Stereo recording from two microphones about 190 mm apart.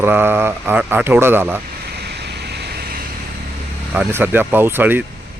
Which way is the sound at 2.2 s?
60° right (ahead or behind).